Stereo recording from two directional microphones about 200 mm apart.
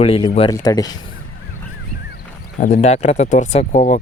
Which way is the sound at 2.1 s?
40° left (ahead or behind).